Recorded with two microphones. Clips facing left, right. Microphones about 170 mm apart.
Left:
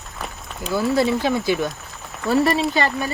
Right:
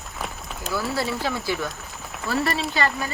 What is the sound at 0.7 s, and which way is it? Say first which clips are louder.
Speech: left 7 dB; 20° left (ahead or behind).